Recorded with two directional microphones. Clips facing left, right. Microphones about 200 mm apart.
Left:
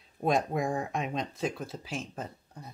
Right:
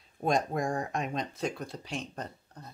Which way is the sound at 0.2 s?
Centre (ahead or behind).